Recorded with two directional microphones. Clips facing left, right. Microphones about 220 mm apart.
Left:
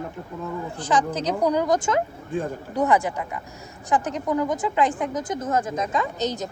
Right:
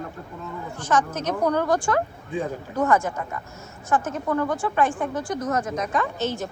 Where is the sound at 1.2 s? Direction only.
15° left (ahead or behind).